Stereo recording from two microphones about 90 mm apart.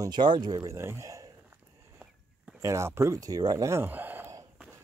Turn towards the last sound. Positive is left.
turn(degrees=-20)  # may be behind; listen again after turning